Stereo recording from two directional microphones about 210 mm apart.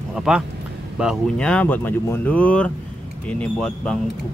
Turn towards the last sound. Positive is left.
turn(degrees=5)  # may be behind; listen again after turning